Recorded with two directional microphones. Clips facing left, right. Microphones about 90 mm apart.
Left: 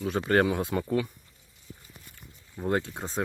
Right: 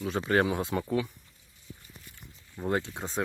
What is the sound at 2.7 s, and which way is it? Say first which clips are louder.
Speech: left 2 dB; 40° left (ahead or behind).